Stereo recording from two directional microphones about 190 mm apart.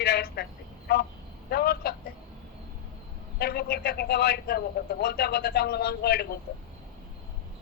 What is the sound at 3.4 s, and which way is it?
A man's voice, 55° left (ahead or behind).